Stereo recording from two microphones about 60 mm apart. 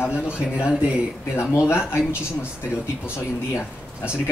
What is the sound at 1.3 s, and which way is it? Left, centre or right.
Speech, left.